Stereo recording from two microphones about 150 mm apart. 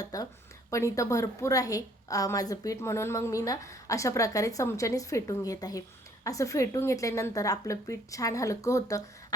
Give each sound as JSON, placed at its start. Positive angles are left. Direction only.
{"t": 0.0, "sound": "a woman's voice", "side_deg": 25}